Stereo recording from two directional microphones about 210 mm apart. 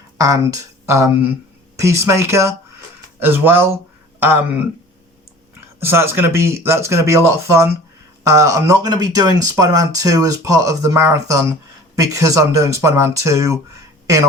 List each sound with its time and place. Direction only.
0.2 s speech: 15° right (ahead or behind)
5.8 s speech: 10° right (ahead or behind)